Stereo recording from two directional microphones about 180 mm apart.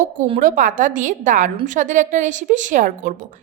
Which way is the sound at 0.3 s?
50° right (ahead or behind).